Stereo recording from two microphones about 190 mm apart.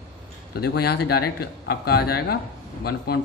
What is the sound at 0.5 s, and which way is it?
A man's voice, 55° left (ahead or behind).